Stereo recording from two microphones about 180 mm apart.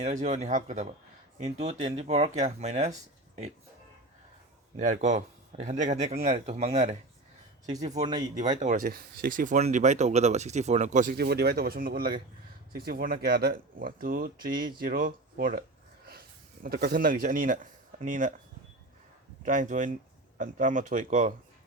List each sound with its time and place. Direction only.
0.0 s speech: 40° right (ahead or behind)
4.8 s speech: 40° right (ahead or behind)
8.4 s speech: 40° right (ahead or behind)
16.6 s speech: 60° right (ahead or behind); by 18.3 s 45° right (ahead or behind)
19.5 s speech: 45° right (ahead or behind)